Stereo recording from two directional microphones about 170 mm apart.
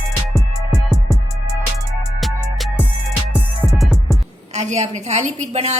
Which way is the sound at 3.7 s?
Centre (ahead or behind).